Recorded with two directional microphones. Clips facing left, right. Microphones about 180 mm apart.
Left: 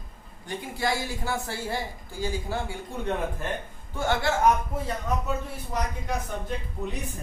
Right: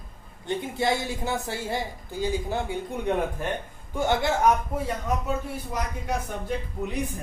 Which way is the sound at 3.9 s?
20° right (ahead or behind).